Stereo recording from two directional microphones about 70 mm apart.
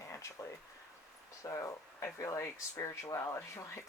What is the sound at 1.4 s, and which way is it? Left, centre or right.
Speech, left.